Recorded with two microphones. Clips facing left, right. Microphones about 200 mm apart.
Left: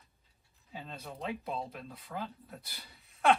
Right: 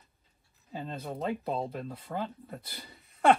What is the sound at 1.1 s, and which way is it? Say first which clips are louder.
Speech: right 5 dB; 45° right (ahead or behind).